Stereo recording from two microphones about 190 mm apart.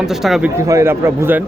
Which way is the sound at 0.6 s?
15° right (ahead or behind).